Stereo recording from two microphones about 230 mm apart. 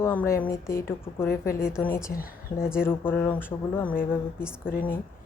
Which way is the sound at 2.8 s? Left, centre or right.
Centre.